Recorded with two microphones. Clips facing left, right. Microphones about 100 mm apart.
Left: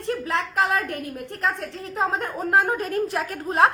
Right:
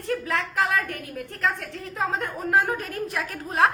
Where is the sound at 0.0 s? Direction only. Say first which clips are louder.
Left 1 dB; 25° left (ahead or behind).